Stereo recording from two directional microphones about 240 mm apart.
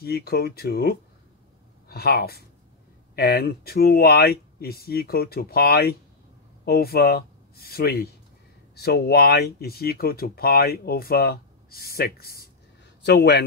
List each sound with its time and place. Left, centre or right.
0.0 s a man's voice: left